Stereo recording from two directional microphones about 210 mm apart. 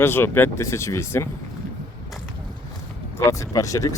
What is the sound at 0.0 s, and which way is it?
Speech, 10° left (ahead or behind).